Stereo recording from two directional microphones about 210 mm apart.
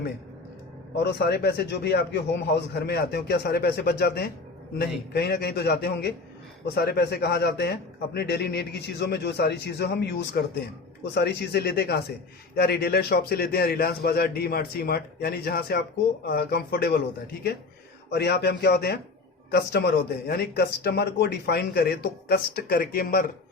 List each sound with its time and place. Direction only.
0.9 s speech: 50° left (ahead or behind)
18.1 s speech: 50° left (ahead or behind)